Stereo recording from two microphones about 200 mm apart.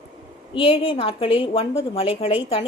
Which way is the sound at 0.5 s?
30° left (ahead or behind).